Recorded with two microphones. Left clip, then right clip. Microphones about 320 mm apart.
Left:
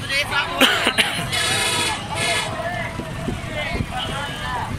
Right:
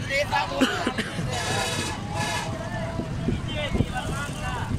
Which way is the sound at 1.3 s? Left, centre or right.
Right.